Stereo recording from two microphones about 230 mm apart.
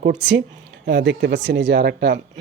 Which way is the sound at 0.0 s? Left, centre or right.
Right.